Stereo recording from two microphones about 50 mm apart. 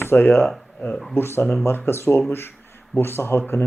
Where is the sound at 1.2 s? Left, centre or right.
Left.